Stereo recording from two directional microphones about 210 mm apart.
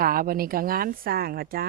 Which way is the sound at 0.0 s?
45° right (ahead or behind).